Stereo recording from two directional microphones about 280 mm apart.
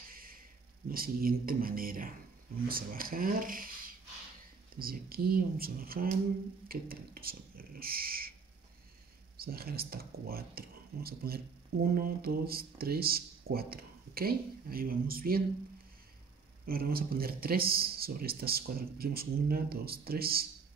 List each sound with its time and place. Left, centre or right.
0.1 s speech: right
9.4 s speech: right
16.6 s speech: right